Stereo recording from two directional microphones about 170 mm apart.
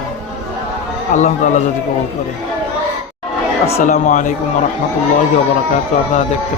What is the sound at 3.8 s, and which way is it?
Speech, 45° left (ahead or behind).